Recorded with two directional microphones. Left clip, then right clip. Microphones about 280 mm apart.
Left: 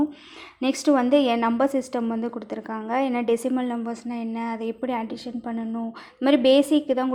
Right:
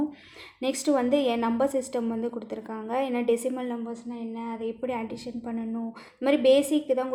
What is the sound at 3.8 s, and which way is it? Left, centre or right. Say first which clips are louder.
A woman's voice: left 5 dB; left.